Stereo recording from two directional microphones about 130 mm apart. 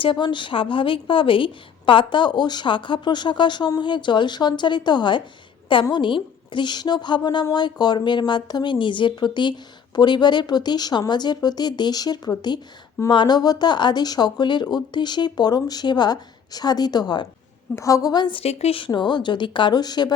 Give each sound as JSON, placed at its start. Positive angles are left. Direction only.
{"t": 0.0, "sound": "speech", "side_deg": 40}
{"t": 18.9, "sound": "speech", "side_deg": 35}